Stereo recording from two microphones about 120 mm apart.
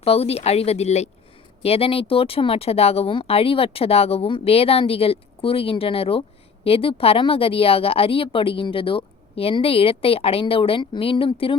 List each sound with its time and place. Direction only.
0.0 s speech: 55° left (ahead or behind)
1.6 s speech: 55° left (ahead or behind)